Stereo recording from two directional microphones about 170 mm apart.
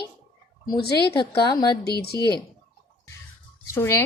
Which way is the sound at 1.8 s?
70° left (ahead or behind).